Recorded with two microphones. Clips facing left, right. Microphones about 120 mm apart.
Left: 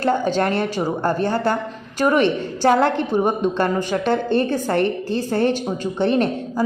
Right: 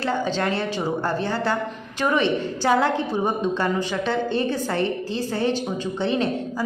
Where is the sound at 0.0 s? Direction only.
50° left (ahead or behind).